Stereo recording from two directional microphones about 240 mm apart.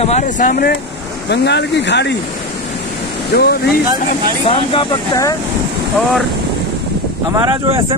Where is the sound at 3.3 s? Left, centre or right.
Left.